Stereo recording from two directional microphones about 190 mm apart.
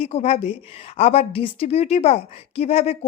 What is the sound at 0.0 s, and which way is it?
A woman's voice, 35° left (ahead or behind).